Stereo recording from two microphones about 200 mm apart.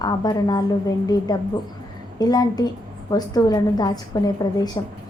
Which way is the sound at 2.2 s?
20° left (ahead or behind).